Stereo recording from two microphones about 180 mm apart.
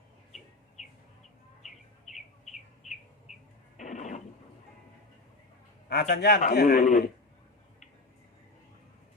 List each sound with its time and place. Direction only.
2.8 s bird: centre (ahead or behind)
3.8 s a sound: 40° left (ahead or behind)
5.9 s a man's voice: 65° left (ahead or behind)